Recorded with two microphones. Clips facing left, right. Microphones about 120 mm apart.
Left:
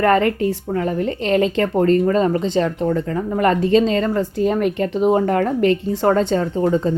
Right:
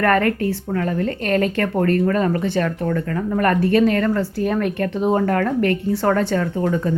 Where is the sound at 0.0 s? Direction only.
20° left (ahead or behind).